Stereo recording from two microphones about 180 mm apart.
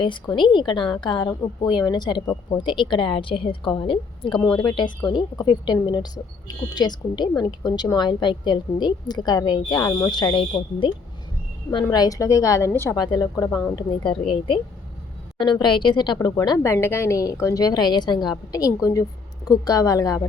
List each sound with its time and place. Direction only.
0.0 s a woman's voice: 25° left (ahead or behind)
2.6 s a woman's voice: 25° left (ahead or behind)
15.4 s a woman's voice: 25° left (ahead or behind)